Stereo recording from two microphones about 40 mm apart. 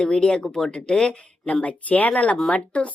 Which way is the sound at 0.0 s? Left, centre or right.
Centre.